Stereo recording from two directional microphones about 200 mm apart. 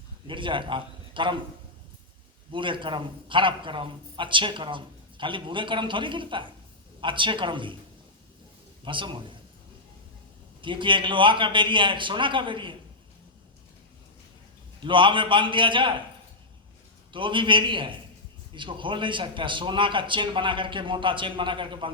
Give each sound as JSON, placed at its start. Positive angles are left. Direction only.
{"t": 0.3, "sound": "a man's voice", "side_deg": -25}
{"t": 2.5, "sound": "a man's voice", "side_deg": -25}
{"t": 8.8, "sound": "a man's voice", "side_deg": -25}
{"t": 10.6, "sound": "a man's voice", "side_deg": -25}
{"t": 14.8, "sound": "a man's voice", "side_deg": -25}
{"t": 17.1, "sound": "a man's voice", "side_deg": -25}